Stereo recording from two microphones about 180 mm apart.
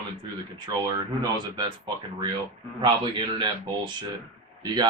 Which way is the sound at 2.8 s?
25° right (ahead or behind).